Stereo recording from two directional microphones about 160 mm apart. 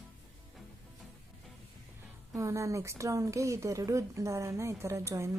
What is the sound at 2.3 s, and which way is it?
Speech, 20° right (ahead or behind).